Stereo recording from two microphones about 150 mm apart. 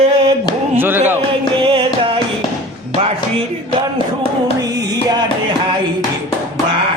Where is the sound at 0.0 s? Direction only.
40° right (ahead or behind).